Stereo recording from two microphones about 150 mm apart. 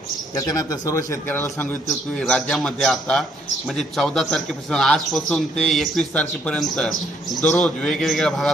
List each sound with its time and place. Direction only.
0.3 s a man's voice: 25° left (ahead or behind)
1.9 s a man's voice: centre (ahead or behind)